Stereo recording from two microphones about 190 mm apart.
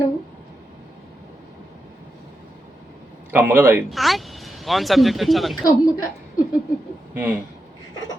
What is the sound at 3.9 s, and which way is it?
Speech, centre (ahead or behind).